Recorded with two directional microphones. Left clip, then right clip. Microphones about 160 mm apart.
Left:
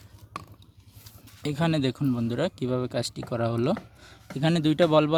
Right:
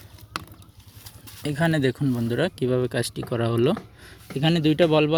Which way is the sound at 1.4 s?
15° left (ahead or behind).